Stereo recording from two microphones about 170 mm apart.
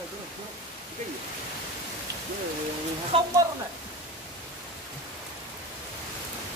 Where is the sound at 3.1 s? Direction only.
35° right (ahead or behind).